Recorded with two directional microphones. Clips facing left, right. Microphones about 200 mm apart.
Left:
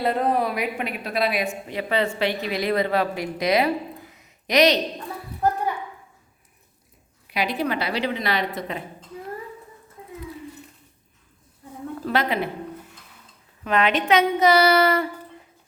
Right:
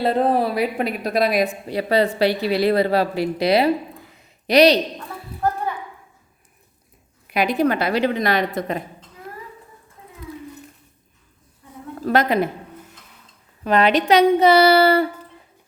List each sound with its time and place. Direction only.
0.0 s speech: 30° right (ahead or behind)
7.3 s a woman's voice: 50° right (ahead or behind)
12.0 s a woman's voice: 45° right (ahead or behind)
13.7 s speech: 35° right (ahead or behind)